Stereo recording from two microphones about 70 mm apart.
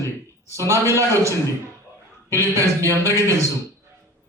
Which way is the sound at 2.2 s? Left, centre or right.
Right.